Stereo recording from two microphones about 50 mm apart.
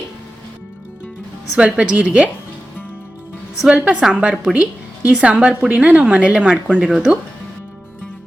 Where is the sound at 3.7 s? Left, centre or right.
Right.